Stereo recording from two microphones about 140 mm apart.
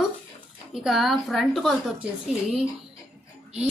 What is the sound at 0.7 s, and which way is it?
Speech, centre (ahead or behind).